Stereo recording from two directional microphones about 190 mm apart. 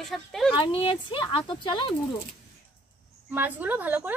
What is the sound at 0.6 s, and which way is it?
Speech, 30° left (ahead or behind).